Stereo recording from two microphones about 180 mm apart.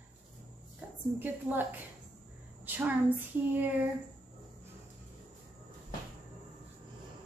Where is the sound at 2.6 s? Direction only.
10° right (ahead or behind).